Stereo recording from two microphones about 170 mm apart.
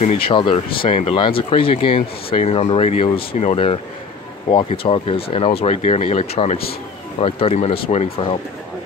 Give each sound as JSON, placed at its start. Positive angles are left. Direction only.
{"t": 0.0, "sound": "speech", "side_deg": 45}
{"t": 0.3, "sound": "speech", "side_deg": 30}